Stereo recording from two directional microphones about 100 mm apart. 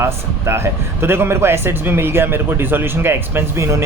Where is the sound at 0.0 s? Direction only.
25° right (ahead or behind).